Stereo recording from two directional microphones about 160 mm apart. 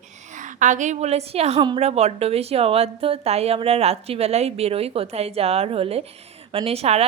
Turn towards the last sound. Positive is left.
turn(degrees=-40)  # may be behind; listen again after turning